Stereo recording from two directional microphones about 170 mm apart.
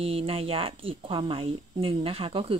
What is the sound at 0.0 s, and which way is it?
A woman's voice, 35° right (ahead or behind).